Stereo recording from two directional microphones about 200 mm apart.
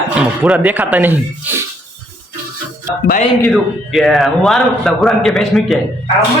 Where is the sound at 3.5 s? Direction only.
Centre (ahead or behind).